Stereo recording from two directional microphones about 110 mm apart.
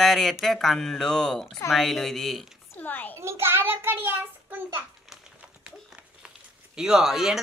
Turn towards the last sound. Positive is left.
turn(degrees=-5)  # may be behind; listen again after turning